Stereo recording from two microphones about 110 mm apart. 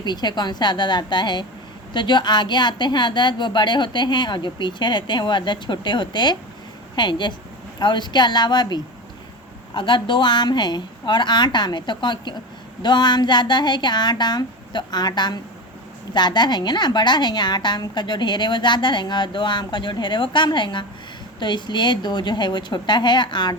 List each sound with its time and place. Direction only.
0.0 s a woman's voice: 40° left (ahead or behind)